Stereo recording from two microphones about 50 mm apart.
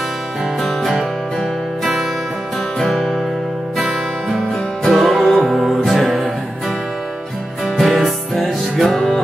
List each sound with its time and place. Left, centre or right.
2.8 s music: centre
3.7 s music: centre
7.6 s music: centre